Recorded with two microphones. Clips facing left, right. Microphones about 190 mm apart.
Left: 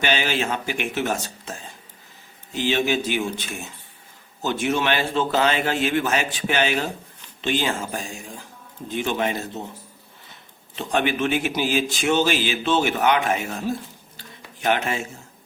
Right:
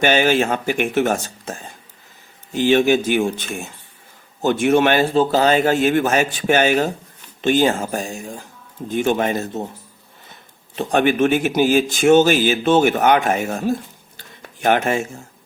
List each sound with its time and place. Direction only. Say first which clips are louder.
0.0 s speech: right 8 dB; 50° right (ahead or behind)
10.8 s speech: right 6 dB; 50° right (ahead or behind)
14.2 s a sound: right 5 dB; 50° right (ahead or behind)